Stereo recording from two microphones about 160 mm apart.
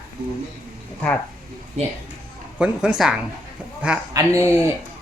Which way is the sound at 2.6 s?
5° right (ahead or behind).